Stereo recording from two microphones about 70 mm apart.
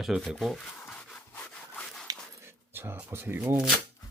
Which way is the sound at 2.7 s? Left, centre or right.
Right.